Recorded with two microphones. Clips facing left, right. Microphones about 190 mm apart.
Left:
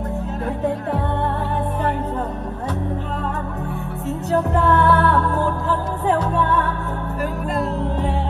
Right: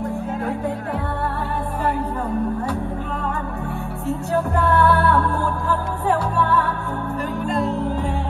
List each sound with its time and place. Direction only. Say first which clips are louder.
4.6 s music: even; 20° left (ahead or behind)
7.4 s music: right 3 dB; centre (ahead or behind)